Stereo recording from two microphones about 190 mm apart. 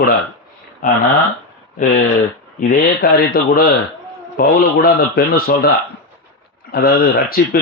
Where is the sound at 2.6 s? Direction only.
45° left (ahead or behind).